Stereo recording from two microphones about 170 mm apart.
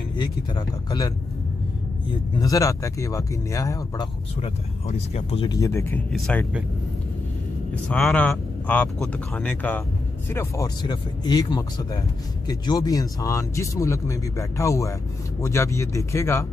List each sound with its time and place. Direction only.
0.2 s speech: 25° left (ahead or behind)
2.3 s speech: 20° left (ahead or behind)
4.4 s speech: 35° left (ahead or behind)
5.5 s speech: 15° left (ahead or behind)
7.7 s speech: 10° left (ahead or behind)